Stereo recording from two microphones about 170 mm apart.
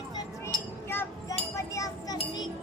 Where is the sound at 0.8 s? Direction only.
15° left (ahead or behind).